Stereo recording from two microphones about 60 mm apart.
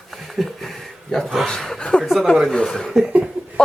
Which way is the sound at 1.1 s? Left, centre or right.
Centre.